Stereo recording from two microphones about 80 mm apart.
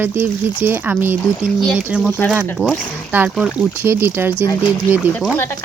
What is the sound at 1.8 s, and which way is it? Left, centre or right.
Speech, centre.